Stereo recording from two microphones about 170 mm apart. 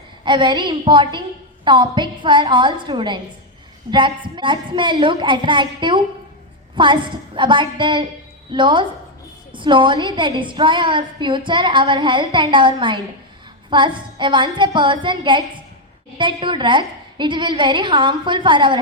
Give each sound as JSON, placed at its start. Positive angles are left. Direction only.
{"t": 0.3, "sound": "a woman's voice", "side_deg": -25}
{"t": 4.4, "sound": "a woman's voice", "side_deg": -30}